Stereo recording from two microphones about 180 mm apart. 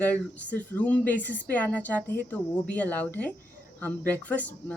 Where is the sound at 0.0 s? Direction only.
10° left (ahead or behind).